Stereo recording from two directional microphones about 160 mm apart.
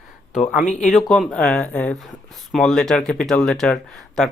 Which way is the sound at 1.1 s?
5° left (ahead or behind).